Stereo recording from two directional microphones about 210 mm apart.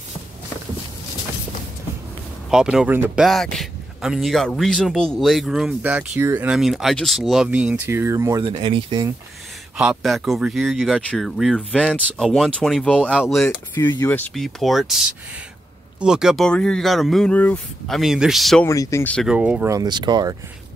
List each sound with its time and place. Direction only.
2.5 s speech: 5° right (ahead or behind); by 9.1 s 20° right (ahead or behind)
9.8 s speech: 5° right (ahead or behind)
13.7 s speech: 15° left (ahead or behind)
18.7 s speech: 15° left (ahead or behind)
19.2 s speech: 5° right (ahead or behind)